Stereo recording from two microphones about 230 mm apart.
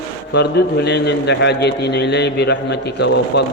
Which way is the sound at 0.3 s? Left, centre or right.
Left.